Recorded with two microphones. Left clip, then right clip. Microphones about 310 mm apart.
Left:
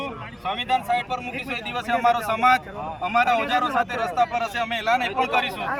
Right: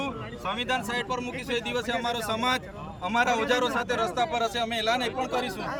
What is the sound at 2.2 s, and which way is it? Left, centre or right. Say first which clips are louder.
Speech: left 8 dB; centre.